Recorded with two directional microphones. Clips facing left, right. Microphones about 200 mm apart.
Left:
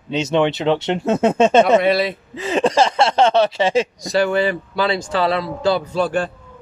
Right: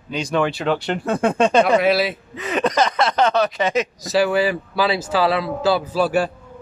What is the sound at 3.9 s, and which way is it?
Speech, 5° right (ahead or behind).